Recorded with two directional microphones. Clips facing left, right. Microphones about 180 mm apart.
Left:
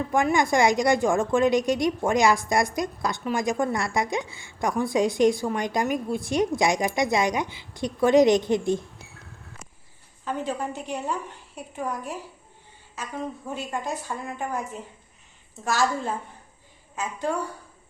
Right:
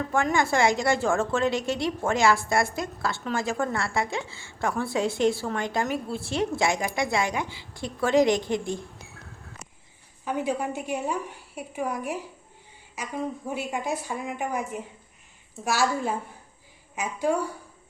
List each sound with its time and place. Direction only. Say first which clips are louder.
0.1 s a woman's voice: left 2 dB; 15° left (ahead or behind)
10.2 s a woman's voice: right 2 dB; 10° right (ahead or behind)